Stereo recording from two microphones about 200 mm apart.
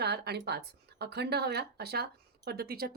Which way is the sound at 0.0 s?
55° right (ahead or behind).